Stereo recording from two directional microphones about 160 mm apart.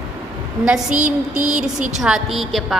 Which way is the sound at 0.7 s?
5° right (ahead or behind).